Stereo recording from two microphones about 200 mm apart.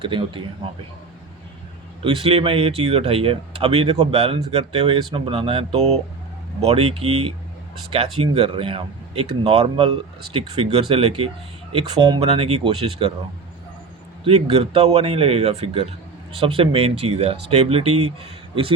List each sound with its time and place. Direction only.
0.0 s speech: 25° right (ahead or behind)
2.0 s speech: 30° right (ahead or behind)
14.3 s speech: 30° right (ahead or behind)